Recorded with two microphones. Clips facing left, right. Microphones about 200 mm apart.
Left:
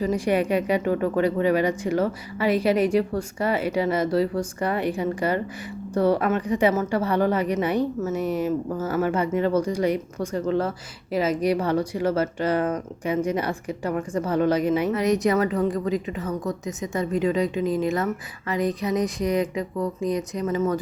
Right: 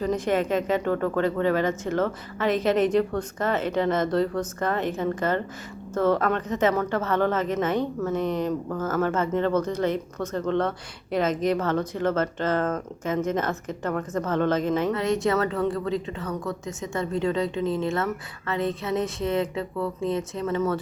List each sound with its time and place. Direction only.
0.0 s a woman's voice: 10° left (ahead or behind)